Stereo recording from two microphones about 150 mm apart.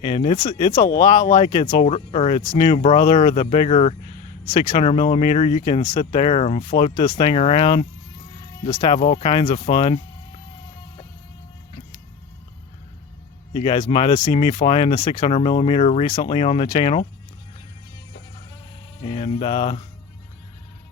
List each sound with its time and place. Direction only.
0.0 s speech: 40° left (ahead or behind)
2.5 s speech: 30° left (ahead or behind)
13.5 s speech: 35° left (ahead or behind)
19.0 s speech: 40° left (ahead or behind)